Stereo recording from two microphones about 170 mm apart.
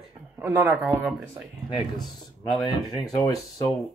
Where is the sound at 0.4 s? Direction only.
15° right (ahead or behind).